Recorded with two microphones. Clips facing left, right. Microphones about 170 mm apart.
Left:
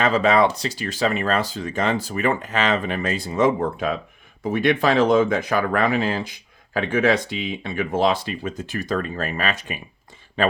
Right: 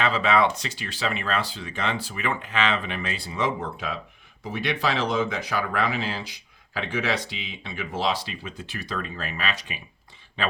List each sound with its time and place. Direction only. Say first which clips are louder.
0.0 s speech: left 5 dB; 45° left (ahead or behind)